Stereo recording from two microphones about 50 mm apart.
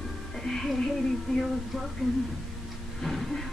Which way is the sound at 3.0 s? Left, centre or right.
Centre.